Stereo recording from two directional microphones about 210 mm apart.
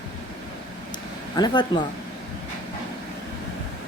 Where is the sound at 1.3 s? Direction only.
20° left (ahead or behind).